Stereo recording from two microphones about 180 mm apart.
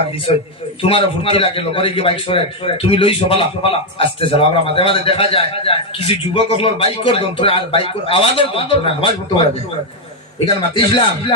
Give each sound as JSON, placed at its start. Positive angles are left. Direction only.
{"t": 0.8, "sound": "a man's voice", "side_deg": 30}
{"t": 10.4, "sound": "speech", "side_deg": 25}